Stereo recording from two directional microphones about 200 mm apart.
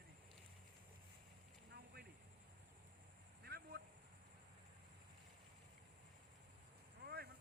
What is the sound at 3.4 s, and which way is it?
Vehicle, 50° right (ahead or behind).